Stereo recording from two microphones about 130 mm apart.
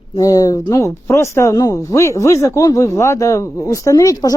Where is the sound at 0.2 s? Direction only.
25° left (ahead or behind).